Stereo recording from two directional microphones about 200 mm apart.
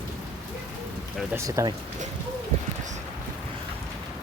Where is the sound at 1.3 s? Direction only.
15° right (ahead or behind).